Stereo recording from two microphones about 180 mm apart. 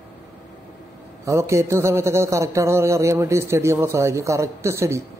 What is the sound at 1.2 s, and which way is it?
A man's voice, 15° right (ahead or behind).